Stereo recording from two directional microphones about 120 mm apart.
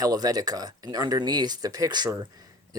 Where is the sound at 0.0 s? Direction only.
30° right (ahead or behind).